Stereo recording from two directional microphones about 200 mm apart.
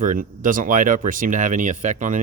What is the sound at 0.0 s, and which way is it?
Speech, 40° right (ahead or behind).